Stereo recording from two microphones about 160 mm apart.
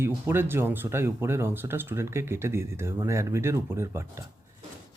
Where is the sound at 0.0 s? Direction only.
15° right (ahead or behind).